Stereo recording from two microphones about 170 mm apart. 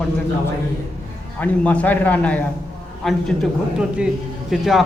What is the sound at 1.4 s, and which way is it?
A man's voice, 5° left (ahead or behind).